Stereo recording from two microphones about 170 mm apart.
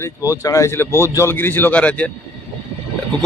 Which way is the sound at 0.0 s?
20° left (ahead or behind).